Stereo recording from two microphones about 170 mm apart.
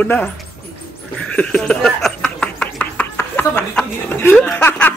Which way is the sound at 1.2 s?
5° left (ahead or behind).